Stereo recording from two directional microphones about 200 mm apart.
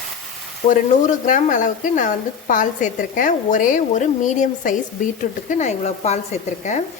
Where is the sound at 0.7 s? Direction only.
40° left (ahead or behind).